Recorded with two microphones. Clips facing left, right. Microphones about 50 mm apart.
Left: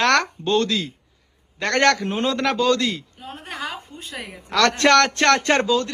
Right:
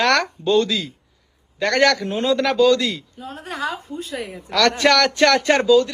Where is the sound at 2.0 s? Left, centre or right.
Left.